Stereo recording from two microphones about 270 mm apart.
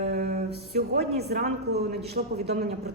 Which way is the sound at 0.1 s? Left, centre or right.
Right.